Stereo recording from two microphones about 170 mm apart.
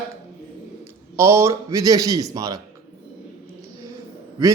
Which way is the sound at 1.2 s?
15° right (ahead or behind).